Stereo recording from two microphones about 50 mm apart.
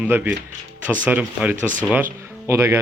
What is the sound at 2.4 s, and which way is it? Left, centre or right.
Speech, right.